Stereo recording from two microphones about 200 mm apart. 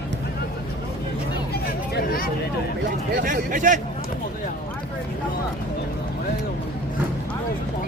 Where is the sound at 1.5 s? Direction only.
50° left (ahead or behind).